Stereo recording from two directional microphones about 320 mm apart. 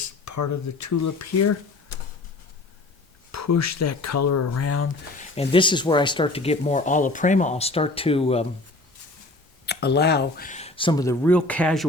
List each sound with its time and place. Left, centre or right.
0.0 s speech: left
3.3 s speech: left
5.4 s speech: centre
9.6 s speech: left; by 11.9 s centre